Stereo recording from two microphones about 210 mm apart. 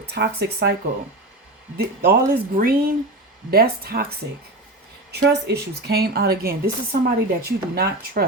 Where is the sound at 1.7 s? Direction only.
45° right (ahead or behind).